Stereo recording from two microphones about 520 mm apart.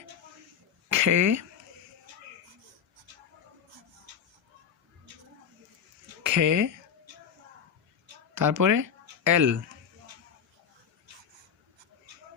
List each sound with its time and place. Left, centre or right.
0.9 s speech: right
6.2 s speech: right
8.4 s speech: right